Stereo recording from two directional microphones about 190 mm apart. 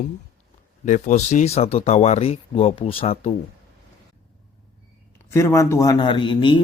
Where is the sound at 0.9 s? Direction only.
40° left (ahead or behind).